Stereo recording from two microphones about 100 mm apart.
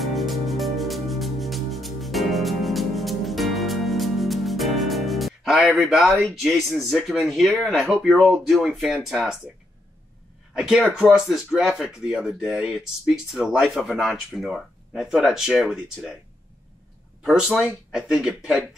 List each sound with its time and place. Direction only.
0.0 s music: centre (ahead or behind)
5.8 s speech: centre (ahead or behind)
10.5 s speech: 5° right (ahead or behind)
17.2 s speech: 5° right (ahead or behind)